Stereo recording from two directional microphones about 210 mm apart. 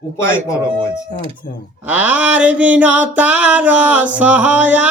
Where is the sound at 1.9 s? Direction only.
5° right (ahead or behind).